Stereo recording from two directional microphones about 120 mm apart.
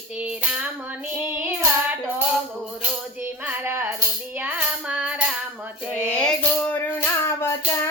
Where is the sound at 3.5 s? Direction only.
15° right (ahead or behind).